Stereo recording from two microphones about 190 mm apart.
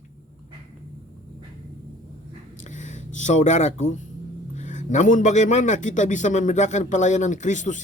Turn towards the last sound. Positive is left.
turn(degrees=40)  # may be behind; listen again after turning